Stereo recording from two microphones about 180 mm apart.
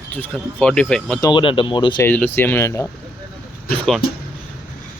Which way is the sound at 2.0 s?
10° left (ahead or behind).